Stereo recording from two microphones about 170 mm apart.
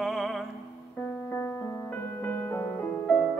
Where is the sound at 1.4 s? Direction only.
10° left (ahead or behind).